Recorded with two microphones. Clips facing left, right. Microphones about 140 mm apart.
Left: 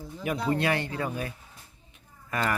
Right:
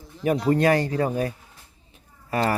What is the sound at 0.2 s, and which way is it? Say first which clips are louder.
Speech: right 7 dB; 40° right (ahead or behind).